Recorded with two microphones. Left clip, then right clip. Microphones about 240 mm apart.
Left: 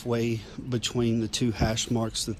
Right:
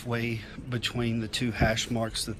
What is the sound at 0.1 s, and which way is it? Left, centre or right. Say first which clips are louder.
Speech: left 4 dB; centre.